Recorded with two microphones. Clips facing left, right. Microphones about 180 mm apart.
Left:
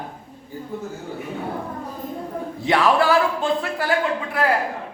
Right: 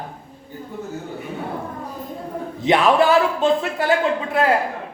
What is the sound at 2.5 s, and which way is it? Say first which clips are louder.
A man's voice: right 3 dB; 20° right (ahead or behind).